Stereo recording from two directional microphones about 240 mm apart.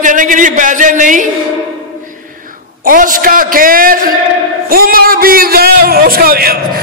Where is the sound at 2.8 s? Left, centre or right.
Right.